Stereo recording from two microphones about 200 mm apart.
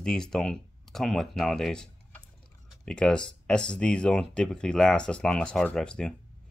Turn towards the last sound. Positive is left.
turn(degrees=5)  # may be behind; listen again after turning